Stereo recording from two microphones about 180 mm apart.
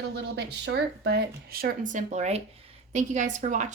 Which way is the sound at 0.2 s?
70° right (ahead or behind).